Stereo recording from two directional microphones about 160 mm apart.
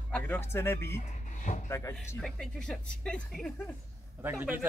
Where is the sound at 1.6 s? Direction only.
15° left (ahead or behind).